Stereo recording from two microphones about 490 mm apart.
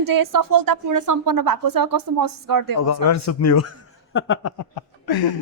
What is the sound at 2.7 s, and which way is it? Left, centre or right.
A man's voice, left.